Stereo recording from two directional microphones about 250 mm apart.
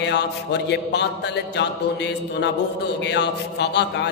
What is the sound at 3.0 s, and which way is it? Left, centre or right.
Mantra, left.